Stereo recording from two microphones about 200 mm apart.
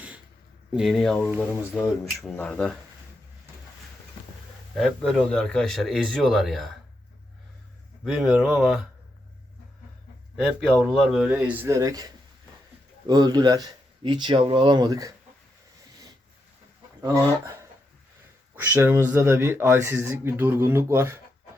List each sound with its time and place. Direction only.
0.7 s speech: centre (ahead or behind)
4.7 s speech: centre (ahead or behind)
8.0 s speech: 5° right (ahead or behind)
10.8 s speech: centre (ahead or behind); by 12.0 s 15° right (ahead or behind)
13.1 s speech: 20° right (ahead or behind)
17.0 s speech: 15° right (ahead or behind)